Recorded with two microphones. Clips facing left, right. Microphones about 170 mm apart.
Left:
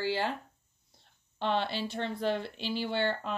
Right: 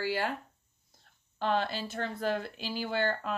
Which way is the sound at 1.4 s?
45° right (ahead or behind).